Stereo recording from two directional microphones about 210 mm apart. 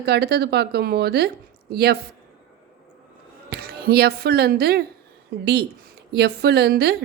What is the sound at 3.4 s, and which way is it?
Speech, 50° right (ahead or behind).